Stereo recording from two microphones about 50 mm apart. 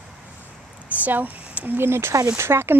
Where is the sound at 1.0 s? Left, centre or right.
Right.